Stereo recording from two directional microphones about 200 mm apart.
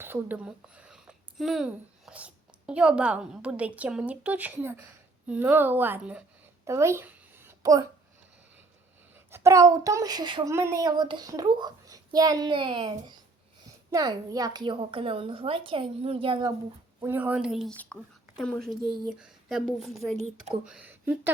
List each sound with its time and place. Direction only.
0.0 s a woman's voice: 10° right (ahead or behind)
6.7 s a sound: 15° right (ahead or behind)
9.1 s speech: 15° right (ahead or behind)
17.0 s a woman's voice: 10° right (ahead or behind)